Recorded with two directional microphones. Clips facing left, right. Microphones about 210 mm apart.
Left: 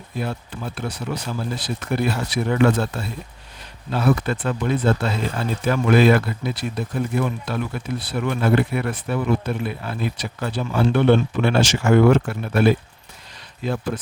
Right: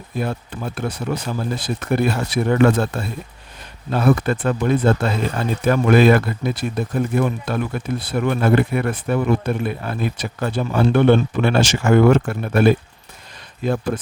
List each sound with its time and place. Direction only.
0.2 s speech: 50° right (ahead or behind)